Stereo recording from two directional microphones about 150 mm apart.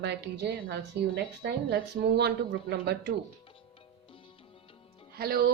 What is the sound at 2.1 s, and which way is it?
Speech, 90° right.